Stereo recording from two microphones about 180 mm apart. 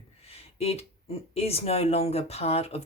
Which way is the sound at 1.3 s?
35° left (ahead or behind).